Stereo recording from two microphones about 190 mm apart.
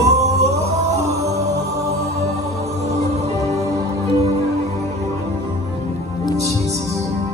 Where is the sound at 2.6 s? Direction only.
35° right (ahead or behind).